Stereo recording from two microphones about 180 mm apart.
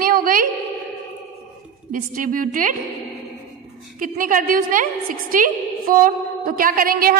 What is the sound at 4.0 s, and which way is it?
A woman's voice, 50° right (ahead or behind).